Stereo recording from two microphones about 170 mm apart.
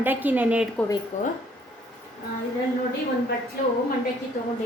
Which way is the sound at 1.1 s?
45° left (ahead or behind).